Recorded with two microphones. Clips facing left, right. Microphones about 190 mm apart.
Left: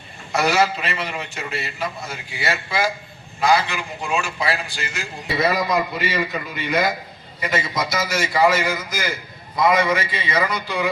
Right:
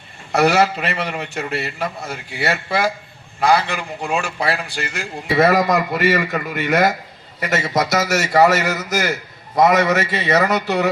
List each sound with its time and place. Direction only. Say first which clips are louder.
0.3 s a man's voice: right 4 dB; 60° right (ahead or behind)
6.2 s a man's voice: right 5 dB; 85° right